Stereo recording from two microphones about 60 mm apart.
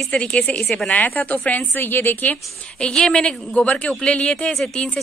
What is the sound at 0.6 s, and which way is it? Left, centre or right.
Speech, centre.